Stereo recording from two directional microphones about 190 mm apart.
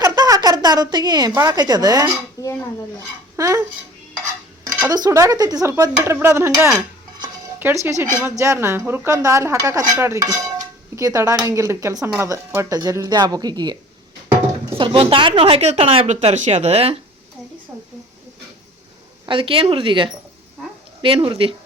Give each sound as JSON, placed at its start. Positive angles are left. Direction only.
{"t": 0.0, "sound": "a sound", "side_deg": -20}
{"t": 1.3, "sound": "speech", "side_deg": -20}
{"t": 2.4, "sound": "a sound", "side_deg": -15}
{"t": 3.3, "sound": "speech", "side_deg": -15}
{"t": 4.6, "sound": "speech", "side_deg": -15}
{"t": 14.8, "sound": "speech", "side_deg": -25}
{"t": 19.2, "sound": "speech", "side_deg": -25}